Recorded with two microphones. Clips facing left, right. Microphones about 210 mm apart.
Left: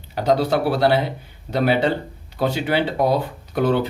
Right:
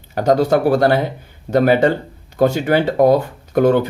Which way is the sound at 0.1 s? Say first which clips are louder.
Right 4 dB; 45° right (ahead or behind).